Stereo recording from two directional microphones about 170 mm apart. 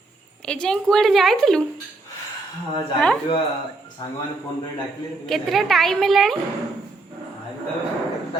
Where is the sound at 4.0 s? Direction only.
25° left (ahead or behind).